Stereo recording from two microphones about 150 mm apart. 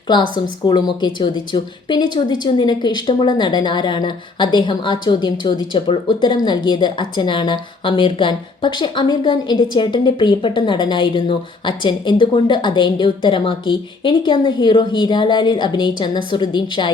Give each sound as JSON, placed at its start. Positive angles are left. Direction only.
{"t": 0.1, "sound": "a woman's voice", "side_deg": 30}